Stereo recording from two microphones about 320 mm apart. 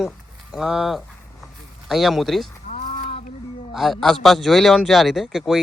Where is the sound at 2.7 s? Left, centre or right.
Centre.